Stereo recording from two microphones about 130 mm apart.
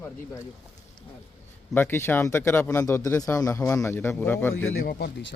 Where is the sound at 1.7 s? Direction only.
15° left (ahead or behind).